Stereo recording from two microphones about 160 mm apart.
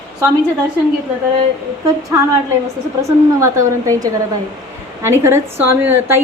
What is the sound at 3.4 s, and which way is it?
A woman's voice, 20° right (ahead or behind).